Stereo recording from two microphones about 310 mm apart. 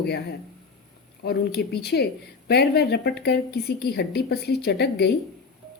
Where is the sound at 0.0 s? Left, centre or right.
Left.